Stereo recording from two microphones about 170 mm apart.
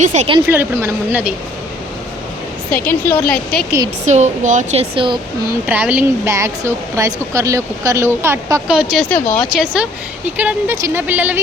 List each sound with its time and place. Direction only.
0.0 s speech: 45° right (ahead or behind)
0.4 s speech: 15° right (ahead or behind)
2.6 s a woman's voice: 10° left (ahead or behind)
4.0 s speech: 45° right (ahead or behind)
4.9 s speech: 25° right (ahead or behind)
5.6 s speech: 10° right (ahead or behind)
8.6 s speech: 5° right (ahead or behind)
9.0 s a woman's voice: 10° left (ahead or behind); by 11.3 s 10° right (ahead or behind)